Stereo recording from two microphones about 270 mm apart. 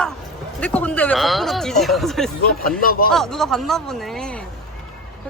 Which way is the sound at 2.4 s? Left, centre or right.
Left.